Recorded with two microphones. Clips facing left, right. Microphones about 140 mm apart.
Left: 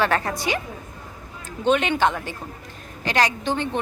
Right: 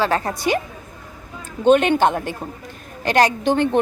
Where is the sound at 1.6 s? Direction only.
50° right (ahead or behind).